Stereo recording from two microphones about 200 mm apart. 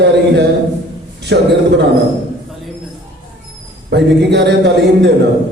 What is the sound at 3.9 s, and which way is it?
Speech, 55° right (ahead or behind).